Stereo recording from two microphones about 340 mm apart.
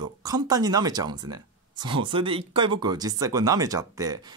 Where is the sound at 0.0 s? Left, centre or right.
Centre.